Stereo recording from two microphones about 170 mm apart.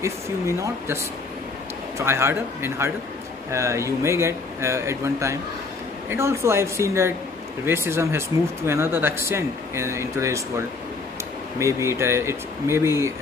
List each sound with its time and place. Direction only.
0.0 s speech: 15° right (ahead or behind)
2.0 s speech: 15° right (ahead or behind)
11.5 s speech: 15° right (ahead or behind)